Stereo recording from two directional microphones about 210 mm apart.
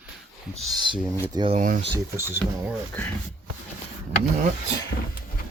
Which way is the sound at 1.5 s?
40° right (ahead or behind).